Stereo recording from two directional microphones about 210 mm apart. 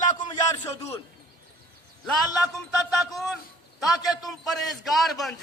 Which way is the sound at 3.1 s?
Centre (ahead or behind).